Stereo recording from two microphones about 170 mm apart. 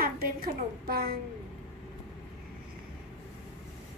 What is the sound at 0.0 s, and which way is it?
A woman's voice, 60° right (ahead or behind).